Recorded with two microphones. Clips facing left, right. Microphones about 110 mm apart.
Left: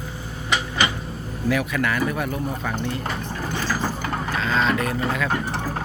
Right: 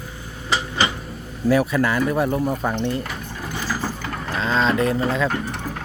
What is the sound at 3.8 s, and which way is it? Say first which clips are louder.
Mechanisms: left 1 dB; 20° left (ahead or behind).